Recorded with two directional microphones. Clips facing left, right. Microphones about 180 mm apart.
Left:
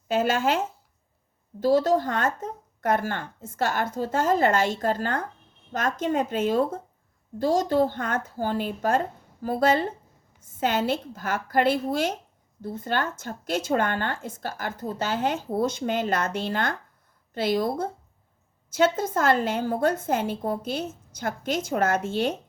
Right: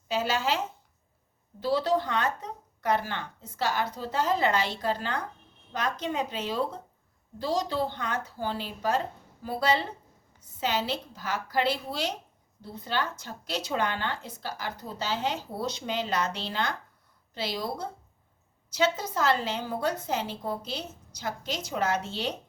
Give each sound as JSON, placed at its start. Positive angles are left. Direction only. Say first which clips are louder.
{"t": 0.1, "sound": "a woman's voice", "louder": "left 5 dB", "side_deg": 50}
{"t": 1.6, "sound": "a woman's voice", "louder": "left 5 dB", "side_deg": 45}